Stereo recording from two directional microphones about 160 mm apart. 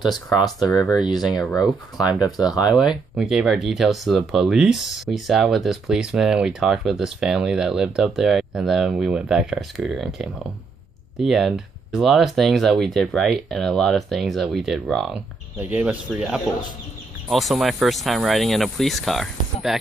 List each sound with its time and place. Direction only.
0.8 s speech: 5° right (ahead or behind)
2.4 s speech: 25° left (ahead or behind)
3.2 s speech: centre (ahead or behind)